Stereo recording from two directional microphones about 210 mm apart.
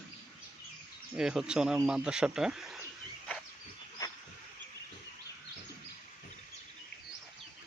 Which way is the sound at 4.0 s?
15° left (ahead or behind).